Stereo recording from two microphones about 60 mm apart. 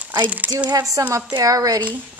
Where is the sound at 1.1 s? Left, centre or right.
Right.